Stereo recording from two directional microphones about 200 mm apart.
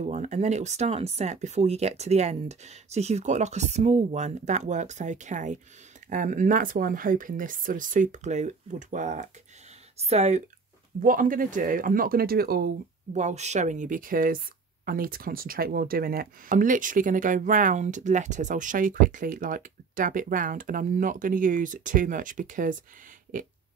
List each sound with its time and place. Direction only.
0.0 s speech: 35° right (ahead or behind)
11.0 s speech: 45° right (ahead or behind)